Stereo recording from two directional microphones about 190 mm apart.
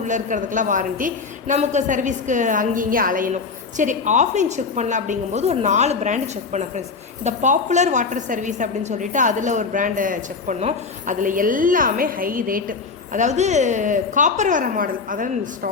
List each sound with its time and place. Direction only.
0.0 s a woman's voice: 40° right (ahead or behind)